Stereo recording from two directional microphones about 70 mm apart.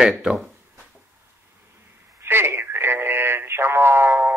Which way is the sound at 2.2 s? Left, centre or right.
Right.